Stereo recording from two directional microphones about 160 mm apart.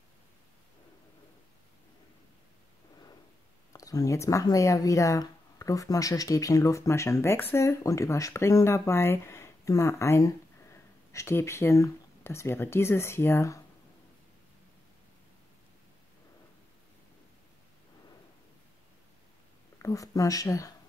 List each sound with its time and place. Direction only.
3.7 s speech: 20° left (ahead or behind)
19.8 s speech: 20° left (ahead or behind)